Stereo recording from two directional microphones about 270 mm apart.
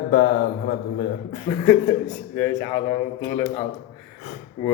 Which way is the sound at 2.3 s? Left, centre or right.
Centre.